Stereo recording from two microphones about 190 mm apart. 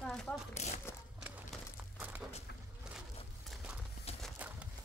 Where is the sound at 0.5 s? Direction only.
35° left (ahead or behind).